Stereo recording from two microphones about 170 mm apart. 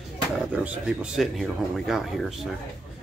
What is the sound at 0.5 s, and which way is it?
Speech, 5° right (ahead or behind).